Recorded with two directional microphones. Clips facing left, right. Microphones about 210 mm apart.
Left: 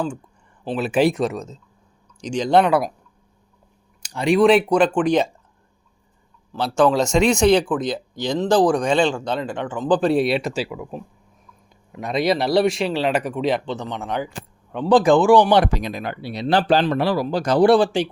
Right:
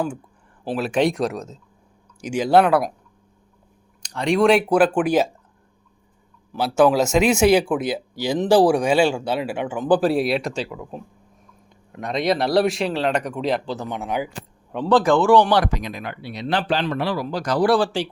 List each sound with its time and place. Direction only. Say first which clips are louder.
0.6 s speech: even; 5° right (ahead or behind)
0.9 s speech: left 2 dB; 5° left (ahead or behind)
4.0 s speech: left 2 dB; 5° left (ahead or behind)
6.5 s speech: right 1 dB; 10° right (ahead or behind)
14.8 s speech: left 2 dB; 15° left (ahead or behind); by 17.2 s 35° left (ahead or behind)
17.2 s speech: left 4 dB; 25° left (ahead or behind)